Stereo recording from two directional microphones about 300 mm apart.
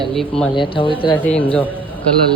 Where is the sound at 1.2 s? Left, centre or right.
Centre.